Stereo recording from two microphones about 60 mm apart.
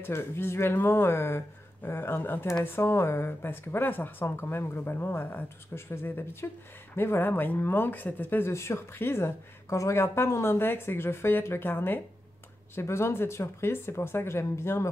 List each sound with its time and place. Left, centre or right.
0.0 s a woman's voice: left
9.7 s speech: left
12.7 s speech: left